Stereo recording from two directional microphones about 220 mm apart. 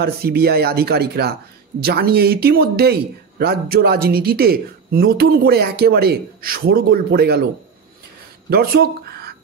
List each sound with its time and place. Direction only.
0.0 s speech: 45° right (ahead or behind)
8.5 s speech: 45° right (ahead or behind)